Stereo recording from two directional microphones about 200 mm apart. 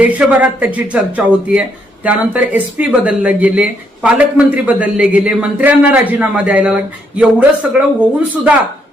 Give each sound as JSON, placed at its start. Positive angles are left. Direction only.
{"t": 0.0, "sound": "a man's voice", "side_deg": -5}